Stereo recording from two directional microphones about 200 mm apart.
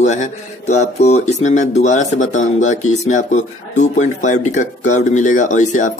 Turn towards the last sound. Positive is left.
turn(degrees=40)  # may be behind; listen again after turning